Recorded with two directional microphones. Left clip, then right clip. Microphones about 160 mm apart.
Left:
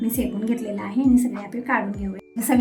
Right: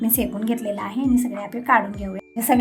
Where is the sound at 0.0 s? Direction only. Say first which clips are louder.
Right 1 dB; 30° right (ahead or behind).